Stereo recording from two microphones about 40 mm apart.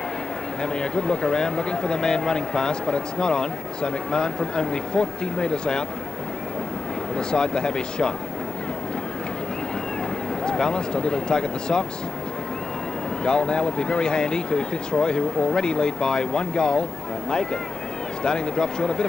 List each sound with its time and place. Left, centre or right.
0.6 s a man's voice: left
7.2 s a man's voice: left
10.4 s a man's voice: left
13.2 s a man's voice: left